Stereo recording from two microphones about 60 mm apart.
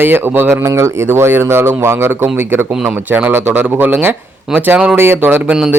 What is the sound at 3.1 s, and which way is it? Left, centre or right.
Speech, right.